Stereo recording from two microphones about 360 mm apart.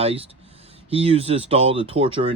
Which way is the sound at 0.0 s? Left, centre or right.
Centre.